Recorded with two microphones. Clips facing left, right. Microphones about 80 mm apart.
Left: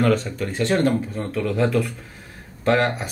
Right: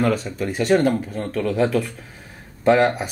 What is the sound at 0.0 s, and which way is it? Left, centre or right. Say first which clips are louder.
Speech: left 1 dB; centre.